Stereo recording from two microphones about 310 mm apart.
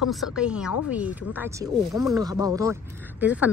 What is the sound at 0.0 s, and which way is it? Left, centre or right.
A woman's voice, centre.